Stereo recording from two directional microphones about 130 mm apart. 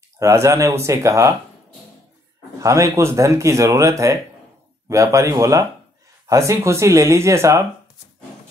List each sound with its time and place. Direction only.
0.2 s speech: 25° right (ahead or behind)
2.6 s speech: 25° right (ahead or behind)